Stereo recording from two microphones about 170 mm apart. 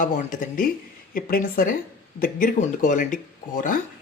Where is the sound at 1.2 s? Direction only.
60° left (ahead or behind).